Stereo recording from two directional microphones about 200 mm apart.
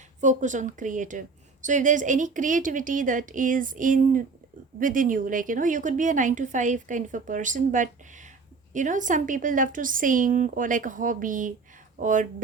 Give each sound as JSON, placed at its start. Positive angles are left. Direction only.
{"t": 0.2, "sound": "a woman's voice", "side_deg": -40}